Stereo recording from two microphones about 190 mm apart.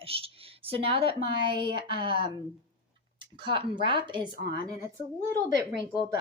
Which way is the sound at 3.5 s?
25° right (ahead or behind).